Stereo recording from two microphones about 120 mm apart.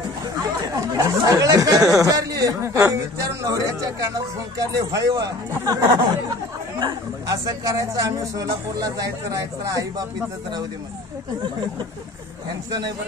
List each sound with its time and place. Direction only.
0.4 s speech: 25° right (ahead or behind)